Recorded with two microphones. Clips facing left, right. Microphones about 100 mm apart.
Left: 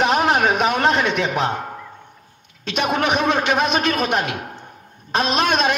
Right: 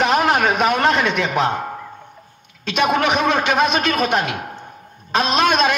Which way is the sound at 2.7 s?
70° right (ahead or behind).